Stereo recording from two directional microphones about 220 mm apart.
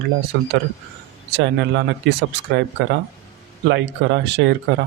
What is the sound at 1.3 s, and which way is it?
Speech, 55° right (ahead or behind).